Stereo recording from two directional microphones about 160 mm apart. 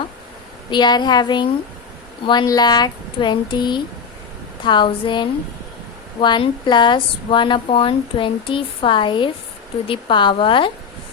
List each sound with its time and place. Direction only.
0.7 s speech: 25° left (ahead or behind)